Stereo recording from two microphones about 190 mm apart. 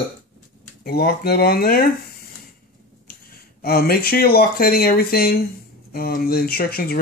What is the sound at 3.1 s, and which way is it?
Speech, 50° left (ahead or behind).